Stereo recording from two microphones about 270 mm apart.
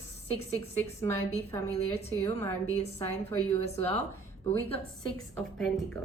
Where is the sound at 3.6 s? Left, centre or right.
Left.